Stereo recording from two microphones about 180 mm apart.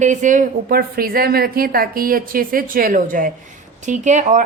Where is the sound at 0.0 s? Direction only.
45° right (ahead or behind).